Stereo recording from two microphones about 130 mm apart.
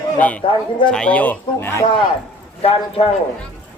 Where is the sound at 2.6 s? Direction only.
45° left (ahead or behind).